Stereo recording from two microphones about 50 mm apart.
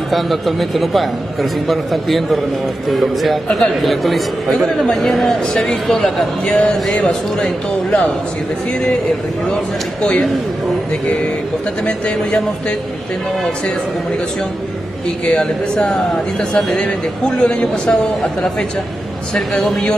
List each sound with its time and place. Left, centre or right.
0.1 s a man's voice: centre
15.2 s a man's voice: left